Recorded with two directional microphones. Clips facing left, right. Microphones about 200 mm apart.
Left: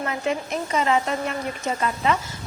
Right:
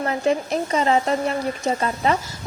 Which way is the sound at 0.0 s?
35° right (ahead or behind).